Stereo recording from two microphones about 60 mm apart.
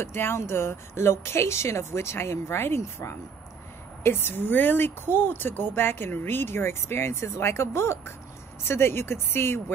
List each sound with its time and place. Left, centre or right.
0.0 s speech: left